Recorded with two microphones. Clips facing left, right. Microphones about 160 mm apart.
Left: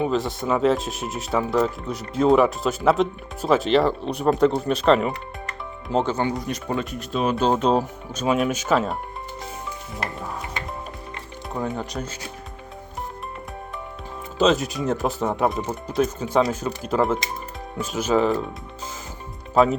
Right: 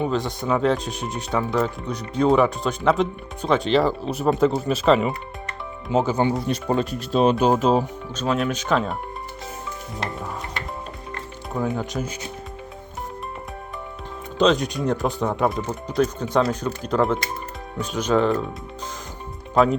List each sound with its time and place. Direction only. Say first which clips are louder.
0.0 s speech: left 1 dB; centre (ahead or behind)
6.2 s speech: right 4 dB; 30° right (ahead or behind)
7.3 s speech: right 1 dB; 10° right (ahead or behind)
8.1 s speech: left 2 dB; 10° left (ahead or behind)
11.5 s speech: right 3 dB; centre (ahead or behind)
14.3 s speech: right 1 dB; 5° left (ahead or behind)
19.6 s speech: even; centre (ahead or behind)